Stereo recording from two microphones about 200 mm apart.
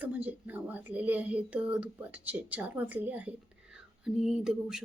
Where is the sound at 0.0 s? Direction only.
10° right (ahead or behind).